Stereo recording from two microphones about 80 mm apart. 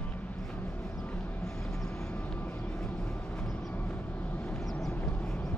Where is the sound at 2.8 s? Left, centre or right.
Centre.